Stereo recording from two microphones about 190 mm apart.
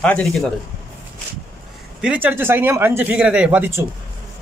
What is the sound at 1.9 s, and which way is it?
A man's voice, 5° right (ahead or behind).